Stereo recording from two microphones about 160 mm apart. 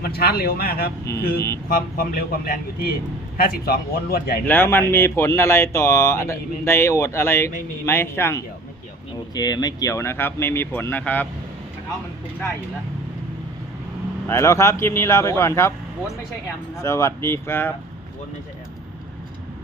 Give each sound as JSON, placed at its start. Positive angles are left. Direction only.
{"t": 0.0, "sound": "a man's voice", "side_deg": 70}
{"t": 1.1, "sound": "speech", "side_deg": 15}
{"t": 1.7, "sound": "a man's voice", "side_deg": 65}
{"t": 4.4, "sound": "speech", "side_deg": 10}
{"t": 14.3, "sound": "speech", "side_deg": 15}
{"t": 16.7, "sound": "speech", "side_deg": 20}